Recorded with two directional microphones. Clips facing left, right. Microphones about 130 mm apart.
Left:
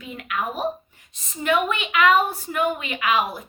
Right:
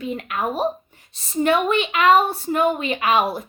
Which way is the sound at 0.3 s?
30° right (ahead or behind).